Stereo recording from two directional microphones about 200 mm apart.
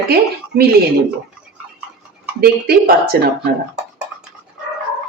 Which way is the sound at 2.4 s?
50° right (ahead or behind).